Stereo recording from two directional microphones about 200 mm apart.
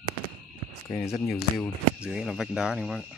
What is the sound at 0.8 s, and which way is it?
Speech, 15° left (ahead or behind).